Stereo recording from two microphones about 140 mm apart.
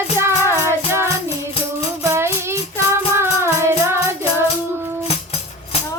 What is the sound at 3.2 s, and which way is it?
Music, 20° right (ahead or behind).